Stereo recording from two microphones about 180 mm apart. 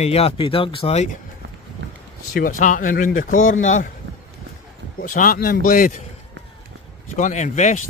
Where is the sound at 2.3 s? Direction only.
50° left (ahead or behind).